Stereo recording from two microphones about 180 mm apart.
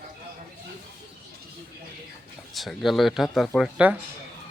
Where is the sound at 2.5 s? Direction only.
Centre (ahead or behind).